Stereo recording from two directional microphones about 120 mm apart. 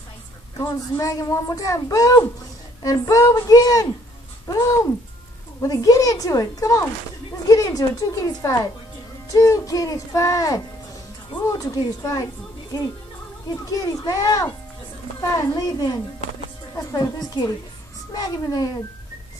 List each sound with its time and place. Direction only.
0.6 s a woman's voice: 30° left (ahead or behind)